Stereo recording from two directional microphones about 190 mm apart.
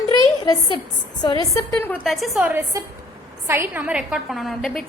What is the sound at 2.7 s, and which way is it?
A woman's voice, 15° right (ahead or behind).